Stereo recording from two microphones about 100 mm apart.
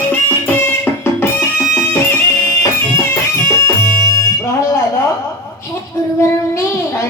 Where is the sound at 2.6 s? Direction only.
30° left (ahead or behind).